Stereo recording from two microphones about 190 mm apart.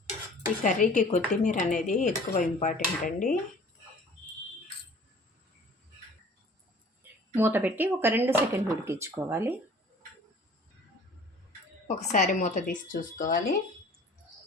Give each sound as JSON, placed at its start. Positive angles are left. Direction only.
{"t": 0.6, "sound": "speech", "side_deg": 40}
{"t": 7.3, "sound": "speech", "side_deg": -10}
{"t": 11.9, "sound": "speech", "side_deg": 40}